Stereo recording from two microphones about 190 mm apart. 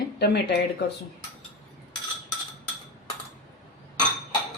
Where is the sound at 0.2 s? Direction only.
60° left (ahead or behind).